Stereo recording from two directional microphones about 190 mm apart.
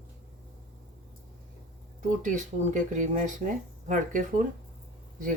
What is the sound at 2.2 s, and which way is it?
Speech, 40° right (ahead or behind).